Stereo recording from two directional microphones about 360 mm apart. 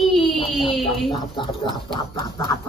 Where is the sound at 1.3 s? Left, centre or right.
Centre.